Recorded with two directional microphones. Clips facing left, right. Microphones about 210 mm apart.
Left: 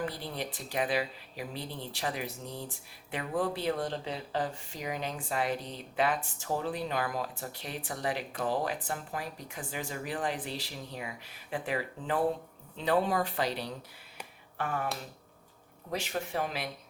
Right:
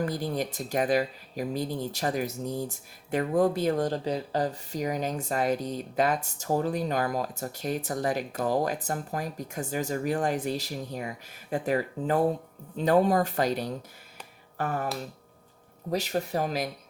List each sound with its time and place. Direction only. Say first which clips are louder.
0.0 s speech: right 7 dB; 45° right (ahead or behind)
15.9 s speech: right 6 dB; 40° right (ahead or behind)